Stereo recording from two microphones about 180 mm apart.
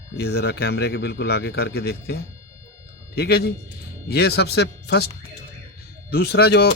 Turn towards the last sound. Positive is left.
turn(degrees=60)  # may be behind; listen again after turning